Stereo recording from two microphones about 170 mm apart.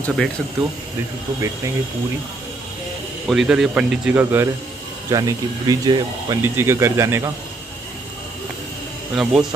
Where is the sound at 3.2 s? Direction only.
5° right (ahead or behind).